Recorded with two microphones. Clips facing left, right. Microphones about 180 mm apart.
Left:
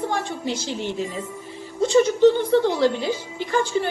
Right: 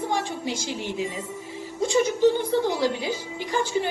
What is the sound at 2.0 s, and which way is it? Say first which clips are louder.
A woman's voice: left 4 dB; 10° right (ahead or behind).